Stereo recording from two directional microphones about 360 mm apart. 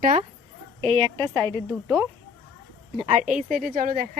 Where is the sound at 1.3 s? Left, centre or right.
Centre.